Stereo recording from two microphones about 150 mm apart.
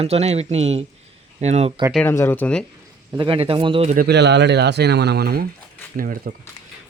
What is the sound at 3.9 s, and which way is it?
Speech, 70° right (ahead or behind).